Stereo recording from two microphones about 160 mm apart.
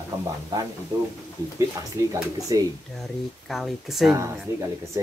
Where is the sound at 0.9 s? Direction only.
20° right (ahead or behind).